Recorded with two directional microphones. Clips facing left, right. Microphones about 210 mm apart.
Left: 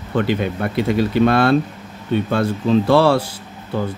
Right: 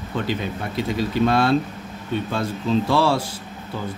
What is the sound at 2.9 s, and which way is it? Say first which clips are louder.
Speech: left 6 dB; 60° left (ahead or behind).